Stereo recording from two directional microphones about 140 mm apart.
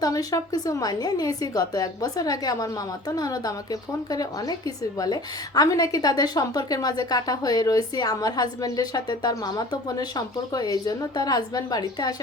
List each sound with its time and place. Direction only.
0.0 s a woman's voice: 25° left (ahead or behind)